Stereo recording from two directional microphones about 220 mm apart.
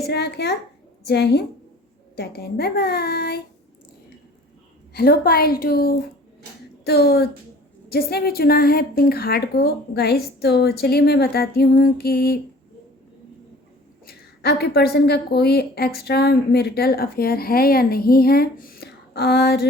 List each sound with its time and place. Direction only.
0.0 s a woman's voice: 50° left (ahead or behind)
4.9 s a woman's voice: 45° left (ahead or behind)
14.1 s a woman's voice: 45° left (ahead or behind)